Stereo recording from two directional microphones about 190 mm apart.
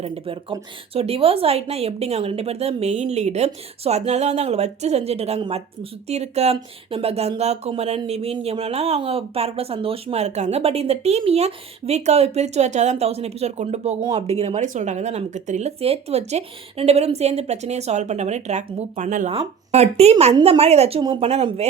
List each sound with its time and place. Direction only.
0.0 s speech: 30° right (ahead or behind)